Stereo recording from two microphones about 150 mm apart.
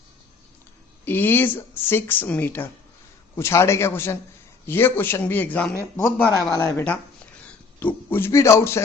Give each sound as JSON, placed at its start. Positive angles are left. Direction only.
{"t": 1.0, "sound": "speech", "side_deg": 15}